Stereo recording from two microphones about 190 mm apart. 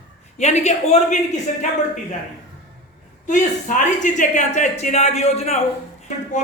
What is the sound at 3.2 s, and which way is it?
Speech, 40° left (ahead or behind).